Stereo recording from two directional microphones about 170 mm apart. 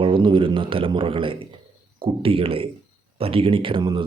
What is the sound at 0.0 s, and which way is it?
Speech, 30° right (ahead or behind).